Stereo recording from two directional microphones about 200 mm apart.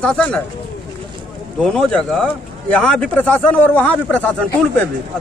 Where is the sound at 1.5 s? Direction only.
Centre (ahead or behind).